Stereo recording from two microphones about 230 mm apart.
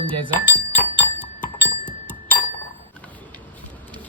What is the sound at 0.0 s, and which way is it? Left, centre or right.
Speech, right.